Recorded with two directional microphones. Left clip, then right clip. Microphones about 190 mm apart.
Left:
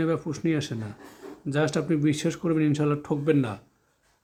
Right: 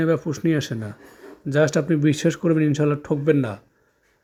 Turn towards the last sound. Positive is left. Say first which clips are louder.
# right 4 dB
turn(degrees=-20)  # may be behind; listen again after turning